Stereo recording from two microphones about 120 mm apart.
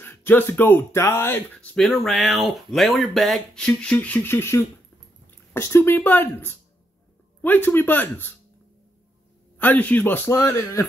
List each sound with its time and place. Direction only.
0.0 s speech: 20° left (ahead or behind)
1.8 s speech: centre (ahead or behind)
9.6 s speech: 15° left (ahead or behind)
10.3 s speech: 25° left (ahead or behind)